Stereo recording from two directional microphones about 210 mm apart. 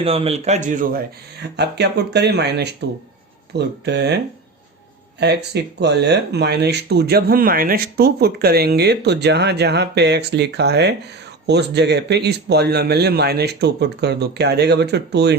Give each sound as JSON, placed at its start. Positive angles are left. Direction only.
{"t": 0.0, "sound": "speech", "side_deg": -25}
{"t": 5.2, "sound": "speech", "side_deg": -55}